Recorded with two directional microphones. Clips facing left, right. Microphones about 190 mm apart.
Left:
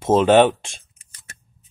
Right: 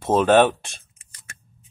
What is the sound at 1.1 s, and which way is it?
Scissors, 35° left (ahead or behind).